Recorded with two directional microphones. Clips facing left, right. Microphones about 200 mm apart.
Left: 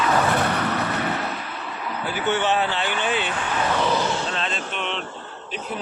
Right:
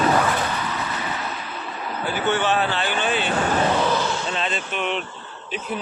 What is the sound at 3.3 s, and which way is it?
Speech, 40° right (ahead or behind).